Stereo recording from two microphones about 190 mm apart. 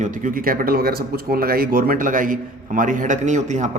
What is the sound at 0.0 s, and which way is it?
Speech, 40° right (ahead or behind).